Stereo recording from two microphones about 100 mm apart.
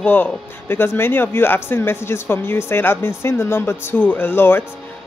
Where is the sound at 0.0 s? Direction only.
20° left (ahead or behind).